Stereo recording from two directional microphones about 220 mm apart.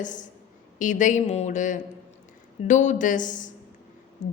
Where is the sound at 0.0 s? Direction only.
35° left (ahead or behind).